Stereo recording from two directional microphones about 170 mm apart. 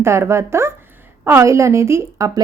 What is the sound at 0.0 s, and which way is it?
A woman's voice, 15° right (ahead or behind).